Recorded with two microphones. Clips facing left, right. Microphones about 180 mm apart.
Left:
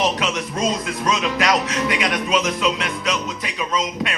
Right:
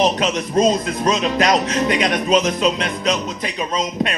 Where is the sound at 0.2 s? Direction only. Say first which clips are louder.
Right 6 dB; 35° right (ahead or behind).